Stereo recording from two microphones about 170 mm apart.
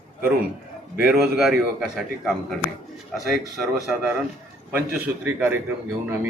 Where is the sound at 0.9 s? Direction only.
5° right (ahead or behind).